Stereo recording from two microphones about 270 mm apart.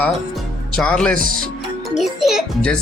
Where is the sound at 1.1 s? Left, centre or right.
Right.